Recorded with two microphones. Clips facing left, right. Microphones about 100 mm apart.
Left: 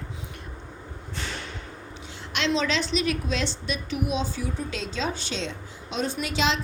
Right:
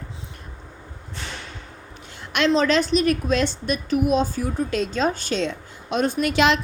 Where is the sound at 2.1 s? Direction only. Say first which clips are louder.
Right 6 dB; 55° right (ahead or behind).